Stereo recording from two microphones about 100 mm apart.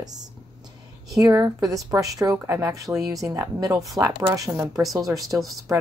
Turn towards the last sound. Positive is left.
turn(degrees=-30)  # may be behind; listen again after turning